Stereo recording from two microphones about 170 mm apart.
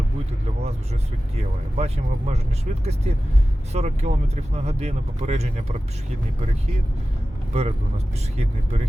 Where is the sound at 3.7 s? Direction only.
40° right (ahead or behind).